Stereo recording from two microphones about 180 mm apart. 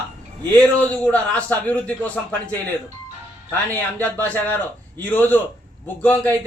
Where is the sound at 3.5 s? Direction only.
10° left (ahead or behind).